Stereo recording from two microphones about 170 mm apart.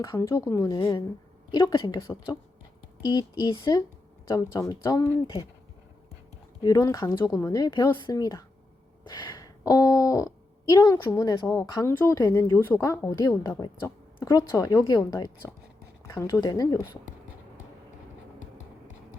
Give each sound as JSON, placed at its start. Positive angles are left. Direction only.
{"t": 0.0, "sound": "speech", "side_deg": 20}
{"t": 0.8, "sound": "speech", "side_deg": 30}
{"t": 4.5, "sound": "speech", "side_deg": 15}
{"t": 6.6, "sound": "speech", "side_deg": 25}
{"t": 9.0, "sound": "a sound", "side_deg": 25}
{"t": 10.7, "sound": "speech", "side_deg": 20}